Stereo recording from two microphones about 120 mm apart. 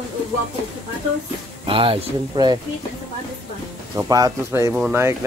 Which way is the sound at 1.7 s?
45° right (ahead or behind).